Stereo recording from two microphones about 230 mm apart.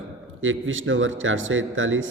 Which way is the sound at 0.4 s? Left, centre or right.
Right.